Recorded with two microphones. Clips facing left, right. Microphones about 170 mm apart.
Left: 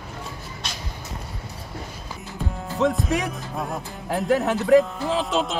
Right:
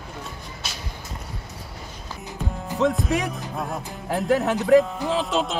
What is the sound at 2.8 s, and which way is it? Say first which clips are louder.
Music: even; centre (ahead or behind).